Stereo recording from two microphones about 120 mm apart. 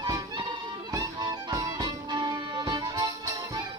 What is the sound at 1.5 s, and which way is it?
Music, 35° right (ahead or behind).